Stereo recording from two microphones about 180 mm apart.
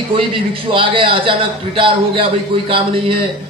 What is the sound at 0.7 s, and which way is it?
A man's voice, 30° right (ahead or behind).